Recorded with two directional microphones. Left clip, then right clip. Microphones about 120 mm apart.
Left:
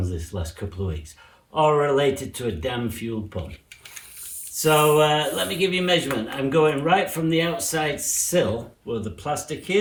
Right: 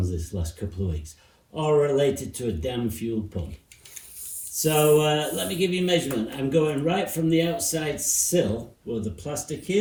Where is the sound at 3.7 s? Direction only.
25° left (ahead or behind).